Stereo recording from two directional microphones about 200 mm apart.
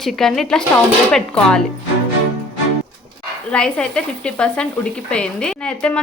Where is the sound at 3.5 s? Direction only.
5° left (ahead or behind).